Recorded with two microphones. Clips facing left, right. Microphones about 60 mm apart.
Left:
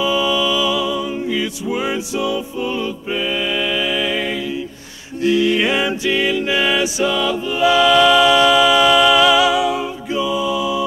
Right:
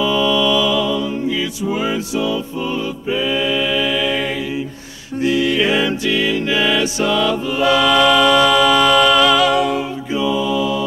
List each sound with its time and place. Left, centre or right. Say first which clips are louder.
0.0 s music: right 1 dB; centre
3.2 s mantra: right 2 dB; left
6.0 s music: even; left
6.4 s music: even; centre